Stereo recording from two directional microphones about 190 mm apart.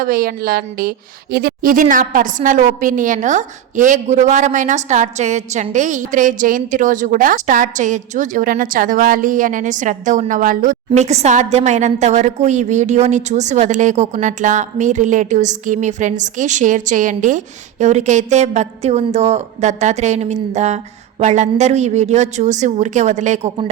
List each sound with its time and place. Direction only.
0.0 s a woman's voice: 50° right (ahead or behind)